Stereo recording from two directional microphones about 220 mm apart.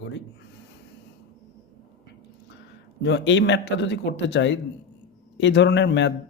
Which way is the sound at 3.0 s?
55° left (ahead or behind).